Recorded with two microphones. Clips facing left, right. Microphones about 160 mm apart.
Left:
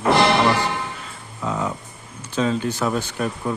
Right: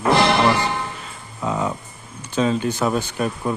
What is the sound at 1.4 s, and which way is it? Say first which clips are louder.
Speech: right 2 dB; 20° right (ahead or behind).